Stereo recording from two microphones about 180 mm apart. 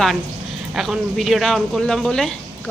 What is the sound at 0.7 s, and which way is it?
Speech, centre (ahead or behind).